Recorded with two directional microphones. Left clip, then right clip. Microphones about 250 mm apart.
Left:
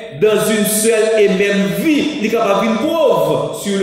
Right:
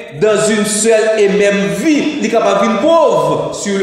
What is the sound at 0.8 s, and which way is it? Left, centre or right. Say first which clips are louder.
A man's voice: right 2 dB; centre.